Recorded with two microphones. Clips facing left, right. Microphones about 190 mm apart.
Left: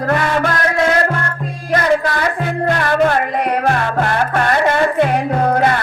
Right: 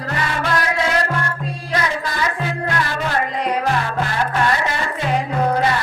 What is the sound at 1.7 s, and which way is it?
Music, 55° left (ahead or behind).